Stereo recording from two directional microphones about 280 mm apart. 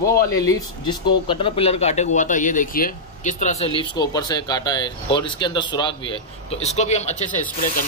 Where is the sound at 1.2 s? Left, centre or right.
Centre.